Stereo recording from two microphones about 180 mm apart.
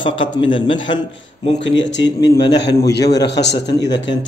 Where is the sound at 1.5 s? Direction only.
85° left.